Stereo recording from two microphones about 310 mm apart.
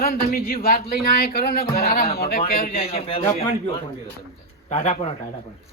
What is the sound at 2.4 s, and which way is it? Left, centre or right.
A man's voice, centre.